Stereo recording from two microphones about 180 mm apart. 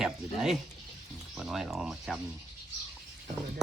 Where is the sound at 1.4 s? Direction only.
Centre (ahead or behind).